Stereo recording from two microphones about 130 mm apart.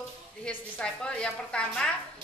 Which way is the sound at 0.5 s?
5° left (ahead or behind).